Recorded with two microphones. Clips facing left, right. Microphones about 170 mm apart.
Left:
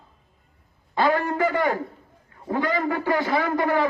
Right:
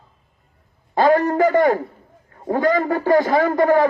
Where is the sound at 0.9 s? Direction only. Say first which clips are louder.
Right 6 dB; 45° right (ahead or behind).